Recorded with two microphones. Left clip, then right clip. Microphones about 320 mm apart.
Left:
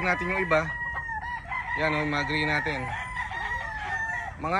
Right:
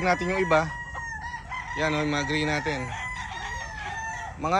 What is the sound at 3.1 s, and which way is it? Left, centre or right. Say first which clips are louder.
Chicken: left 3 dB; left.